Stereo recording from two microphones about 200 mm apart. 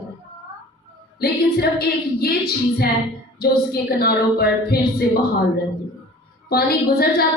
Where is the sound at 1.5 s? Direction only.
50° left (ahead or behind).